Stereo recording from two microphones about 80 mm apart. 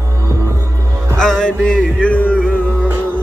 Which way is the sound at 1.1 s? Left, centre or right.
Centre.